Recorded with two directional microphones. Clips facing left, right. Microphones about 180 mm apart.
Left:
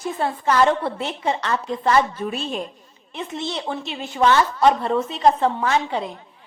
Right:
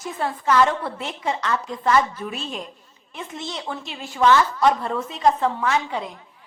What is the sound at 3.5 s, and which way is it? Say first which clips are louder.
A woman's voice: left 4 dB; 25° left (ahead or behind).